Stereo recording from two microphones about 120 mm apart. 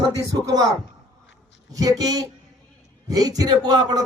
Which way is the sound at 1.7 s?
30° right (ahead or behind).